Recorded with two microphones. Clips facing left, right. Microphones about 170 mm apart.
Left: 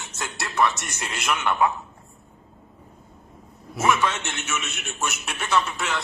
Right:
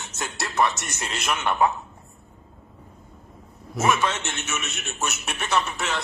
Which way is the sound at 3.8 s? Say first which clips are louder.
Even; 20° right (ahead or behind).